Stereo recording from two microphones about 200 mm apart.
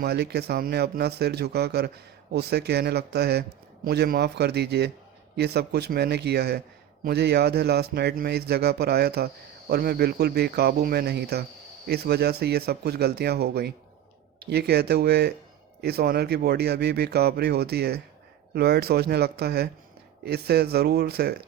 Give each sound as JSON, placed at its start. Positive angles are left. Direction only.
{"t": 0.0, "sound": "a man's voice", "side_deg": -55}